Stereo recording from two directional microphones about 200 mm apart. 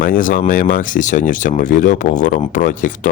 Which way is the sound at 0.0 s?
45° left (ahead or behind).